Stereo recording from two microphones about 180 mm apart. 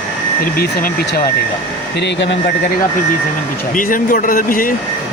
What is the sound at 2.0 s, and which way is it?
Speech, 70° left (ahead or behind).